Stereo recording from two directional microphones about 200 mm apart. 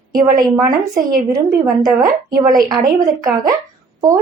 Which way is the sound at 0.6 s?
15° right (ahead or behind).